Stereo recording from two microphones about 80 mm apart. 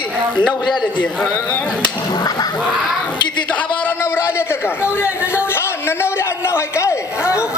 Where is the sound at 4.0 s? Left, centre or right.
Left.